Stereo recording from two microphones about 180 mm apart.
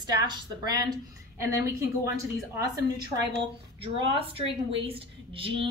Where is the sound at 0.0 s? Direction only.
20° right (ahead or behind).